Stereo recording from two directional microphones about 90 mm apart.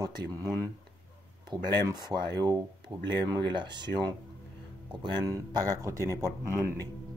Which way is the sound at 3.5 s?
60° right (ahead or behind).